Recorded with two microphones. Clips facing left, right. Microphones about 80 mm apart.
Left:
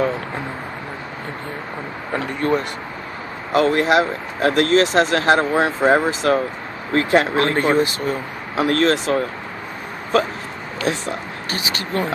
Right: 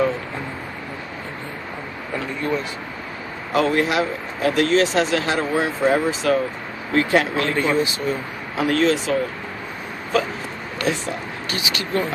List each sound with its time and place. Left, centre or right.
2.1 s speech: left
11.5 s speech: left